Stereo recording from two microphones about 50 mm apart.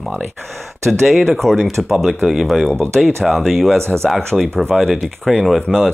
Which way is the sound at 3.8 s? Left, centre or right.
Right.